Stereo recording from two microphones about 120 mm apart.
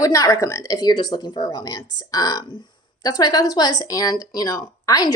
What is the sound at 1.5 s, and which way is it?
A woman's voice, 30° left (ahead or behind).